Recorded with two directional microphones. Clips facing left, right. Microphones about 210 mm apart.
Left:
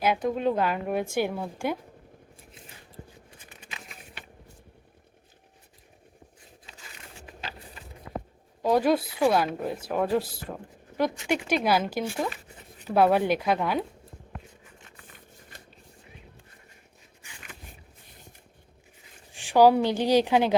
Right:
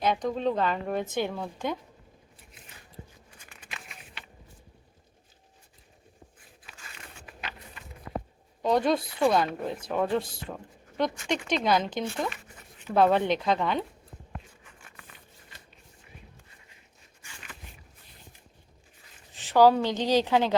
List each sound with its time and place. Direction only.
0.0 s a woman's voice: 5° left (ahead or behind)
7.2 s walk: 30° left (ahead or behind)
8.6 s a woman's voice: 5° left (ahead or behind)
19.3 s a woman's voice: 15° left (ahead or behind)